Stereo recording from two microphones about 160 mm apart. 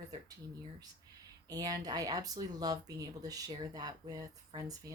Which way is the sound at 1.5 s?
25° right (ahead or behind).